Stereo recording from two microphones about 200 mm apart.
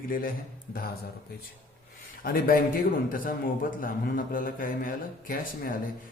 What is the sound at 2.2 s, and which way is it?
A man's voice, 45° left (ahead or behind).